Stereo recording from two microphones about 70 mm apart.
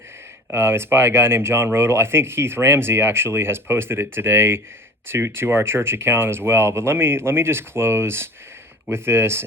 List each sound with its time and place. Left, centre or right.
0.5 s speech: right